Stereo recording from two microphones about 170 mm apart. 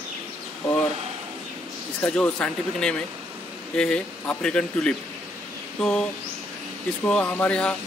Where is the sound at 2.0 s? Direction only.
5° left (ahead or behind).